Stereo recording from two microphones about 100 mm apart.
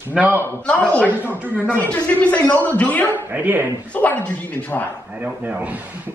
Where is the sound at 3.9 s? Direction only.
15° left (ahead or behind).